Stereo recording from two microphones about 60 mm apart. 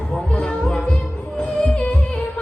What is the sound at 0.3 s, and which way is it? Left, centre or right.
Music, centre.